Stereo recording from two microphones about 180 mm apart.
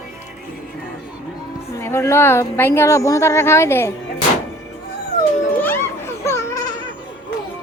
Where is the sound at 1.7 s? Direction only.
15° left (ahead or behind).